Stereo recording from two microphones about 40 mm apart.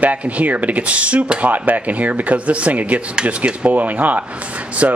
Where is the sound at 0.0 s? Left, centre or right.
Right.